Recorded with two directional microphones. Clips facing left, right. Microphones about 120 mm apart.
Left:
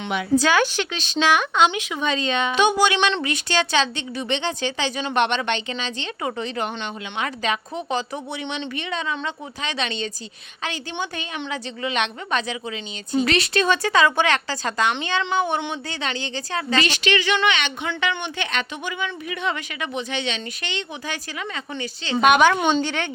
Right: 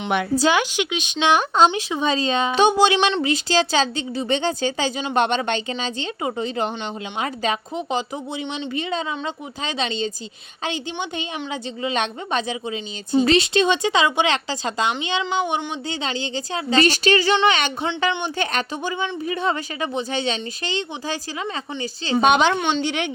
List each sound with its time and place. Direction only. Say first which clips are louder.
0.1 s speech: right 4 dB; 55° right (ahead or behind)
0.5 s speech: even; 15° right (ahead or behind)
1.3 s a woman's voice: right 3 dB; 35° right (ahead or behind)
16.7 s speech: right 5 dB; 40° right (ahead or behind)
22.8 s speech: right 1 dB; 15° right (ahead or behind)